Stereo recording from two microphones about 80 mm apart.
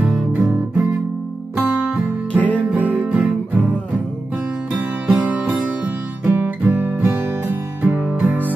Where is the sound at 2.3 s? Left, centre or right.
Centre.